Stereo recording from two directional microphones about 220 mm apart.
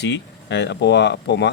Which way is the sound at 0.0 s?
50° left (ahead or behind).